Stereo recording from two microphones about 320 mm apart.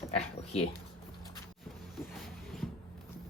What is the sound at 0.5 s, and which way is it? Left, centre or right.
Speech, centre.